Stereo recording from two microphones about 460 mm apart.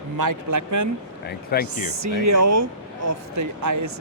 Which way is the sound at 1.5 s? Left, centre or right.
Centre.